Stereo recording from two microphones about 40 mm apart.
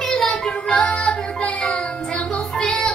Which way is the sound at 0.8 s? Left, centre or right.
Left.